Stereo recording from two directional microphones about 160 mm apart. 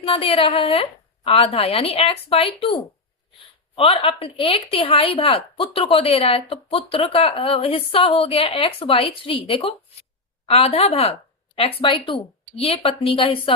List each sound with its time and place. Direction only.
0.0 s a woman's voice: 35° left (ahead or behind)